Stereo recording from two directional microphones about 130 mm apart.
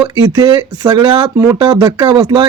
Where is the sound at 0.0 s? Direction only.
35° right (ahead or behind).